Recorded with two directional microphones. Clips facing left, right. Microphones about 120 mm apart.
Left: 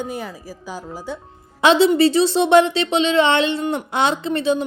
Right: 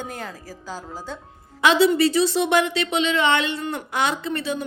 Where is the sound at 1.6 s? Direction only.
25° left (ahead or behind).